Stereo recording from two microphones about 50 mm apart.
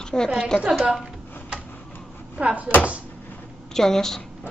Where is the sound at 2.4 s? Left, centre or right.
Right.